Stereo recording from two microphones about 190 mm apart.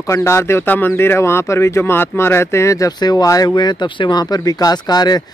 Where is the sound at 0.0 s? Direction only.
15° left (ahead or behind).